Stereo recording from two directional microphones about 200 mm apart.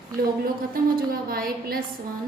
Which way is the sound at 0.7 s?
45° right (ahead or behind).